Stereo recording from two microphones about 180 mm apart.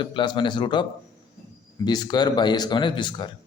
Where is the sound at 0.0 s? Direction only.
25° left (ahead or behind).